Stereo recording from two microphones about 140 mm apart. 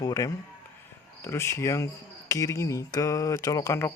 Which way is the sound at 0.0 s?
25° left (ahead or behind).